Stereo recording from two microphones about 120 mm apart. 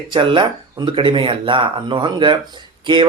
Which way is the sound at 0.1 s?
45° right (ahead or behind).